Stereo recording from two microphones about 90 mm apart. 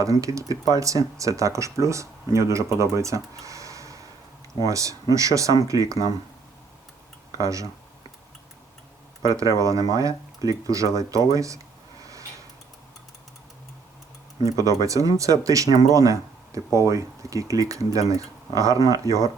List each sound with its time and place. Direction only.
0.0 s speech: 40° right (ahead or behind)
7.3 s speech: 40° right (ahead or behind)
9.2 s speech: 40° right (ahead or behind)
14.4 s speech: 40° right (ahead or behind)